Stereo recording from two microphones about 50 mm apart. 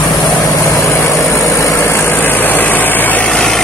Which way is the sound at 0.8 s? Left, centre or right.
Left.